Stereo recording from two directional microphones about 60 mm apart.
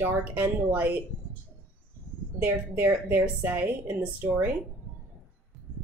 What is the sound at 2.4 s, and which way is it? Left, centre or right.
Speech, right.